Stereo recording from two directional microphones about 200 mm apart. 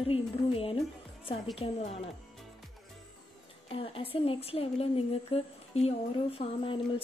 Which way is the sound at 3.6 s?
30° left (ahead or behind).